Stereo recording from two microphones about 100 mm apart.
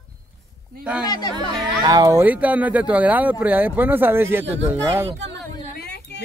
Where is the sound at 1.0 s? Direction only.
40° left (ahead or behind).